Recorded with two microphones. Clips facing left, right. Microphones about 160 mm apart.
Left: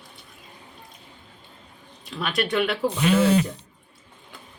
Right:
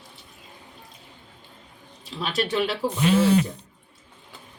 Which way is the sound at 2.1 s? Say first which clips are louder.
Left 1 dB; 30° right (ahead or behind).